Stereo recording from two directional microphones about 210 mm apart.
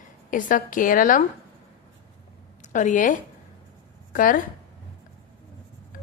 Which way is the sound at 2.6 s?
35° left (ahead or behind).